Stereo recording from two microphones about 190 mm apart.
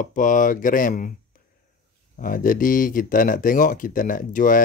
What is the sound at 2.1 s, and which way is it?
Speech, 45° left (ahead or behind).